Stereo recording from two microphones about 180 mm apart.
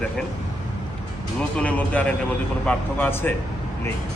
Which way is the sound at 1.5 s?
10° left (ahead or behind).